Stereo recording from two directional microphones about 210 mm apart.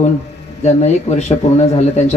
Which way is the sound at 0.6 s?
30° left (ahead or behind).